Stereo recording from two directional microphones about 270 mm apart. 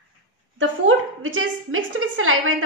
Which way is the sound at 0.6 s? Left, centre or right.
Right.